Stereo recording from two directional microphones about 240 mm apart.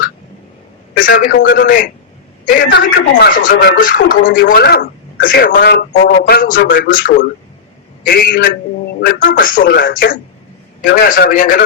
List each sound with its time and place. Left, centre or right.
0.9 s a man's voice: left